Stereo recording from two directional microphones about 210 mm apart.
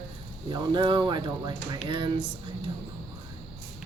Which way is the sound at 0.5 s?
20° right (ahead or behind).